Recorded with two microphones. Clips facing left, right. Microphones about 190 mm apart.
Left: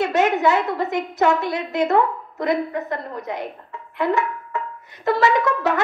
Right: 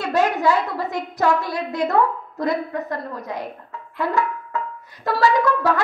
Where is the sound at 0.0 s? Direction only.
20° left (ahead or behind).